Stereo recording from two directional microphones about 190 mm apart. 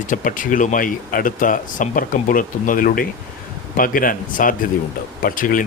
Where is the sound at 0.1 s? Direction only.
45° left (ahead or behind).